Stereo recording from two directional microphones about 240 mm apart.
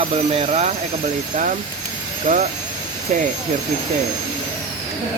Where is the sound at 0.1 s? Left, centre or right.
Right.